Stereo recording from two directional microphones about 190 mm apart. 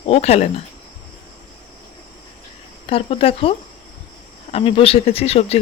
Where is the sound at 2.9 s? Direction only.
30° left (ahead or behind).